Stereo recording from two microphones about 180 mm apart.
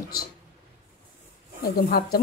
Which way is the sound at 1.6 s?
55° left (ahead or behind).